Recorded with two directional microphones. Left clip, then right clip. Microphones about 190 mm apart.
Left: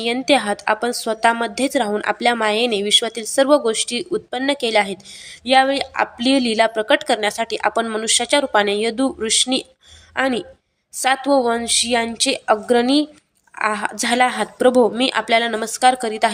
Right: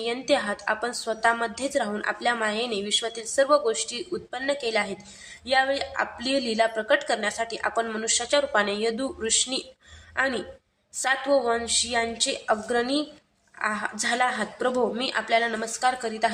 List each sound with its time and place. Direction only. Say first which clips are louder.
0.0 s a woman's voice: left 7 dB; 40° left (ahead or behind)